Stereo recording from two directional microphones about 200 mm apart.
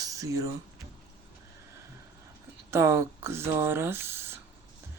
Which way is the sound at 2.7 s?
15° right (ahead or behind).